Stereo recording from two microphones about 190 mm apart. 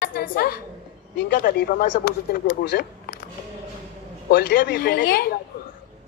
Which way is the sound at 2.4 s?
65° left (ahead or behind).